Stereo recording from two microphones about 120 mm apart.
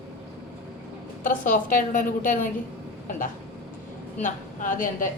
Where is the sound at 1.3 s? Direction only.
90° left.